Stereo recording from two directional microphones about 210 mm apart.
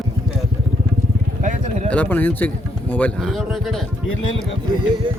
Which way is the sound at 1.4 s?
35° right (ahead or behind).